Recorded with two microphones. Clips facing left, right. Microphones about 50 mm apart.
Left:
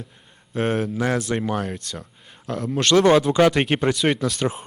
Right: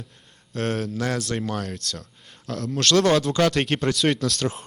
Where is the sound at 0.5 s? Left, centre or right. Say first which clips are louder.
Left 4 dB; centre.